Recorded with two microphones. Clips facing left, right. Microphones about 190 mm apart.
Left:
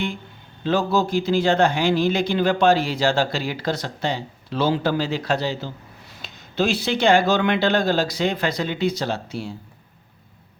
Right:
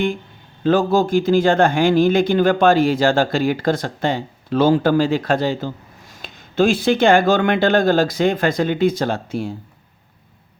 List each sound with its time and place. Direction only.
0.6 s speech: 50° right (ahead or behind)